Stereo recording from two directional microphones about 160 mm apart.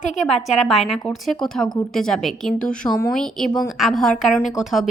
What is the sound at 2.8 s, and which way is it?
Speech, 25° left (ahead or behind).